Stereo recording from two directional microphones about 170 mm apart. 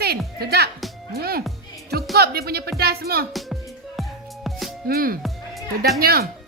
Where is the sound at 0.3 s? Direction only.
70° right (ahead or behind).